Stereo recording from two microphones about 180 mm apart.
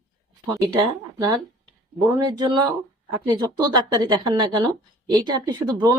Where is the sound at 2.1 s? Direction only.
25° right (ahead or behind).